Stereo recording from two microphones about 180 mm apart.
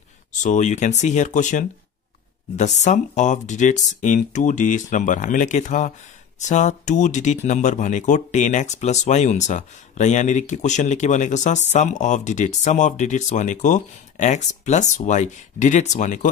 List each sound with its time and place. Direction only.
0.3 s speech: 40° left (ahead or behind)